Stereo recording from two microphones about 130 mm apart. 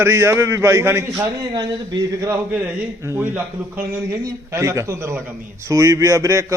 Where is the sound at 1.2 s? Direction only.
30° right (ahead or behind).